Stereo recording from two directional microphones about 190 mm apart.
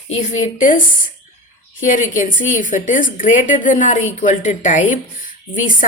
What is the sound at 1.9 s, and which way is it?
A woman's voice, 40° left (ahead or behind).